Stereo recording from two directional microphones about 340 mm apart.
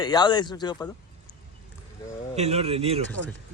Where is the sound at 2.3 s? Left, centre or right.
Centre.